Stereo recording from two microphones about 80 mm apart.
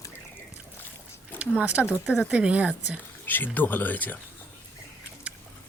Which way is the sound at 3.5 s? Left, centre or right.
Left.